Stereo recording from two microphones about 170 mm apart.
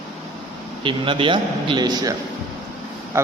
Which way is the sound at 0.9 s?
30° right (ahead or behind).